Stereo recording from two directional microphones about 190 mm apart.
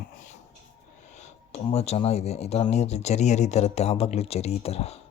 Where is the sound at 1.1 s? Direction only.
35° left (ahead or behind).